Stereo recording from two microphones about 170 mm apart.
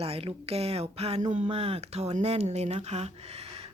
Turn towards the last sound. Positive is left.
turn(degrees=-40)  # may be behind; listen again after turning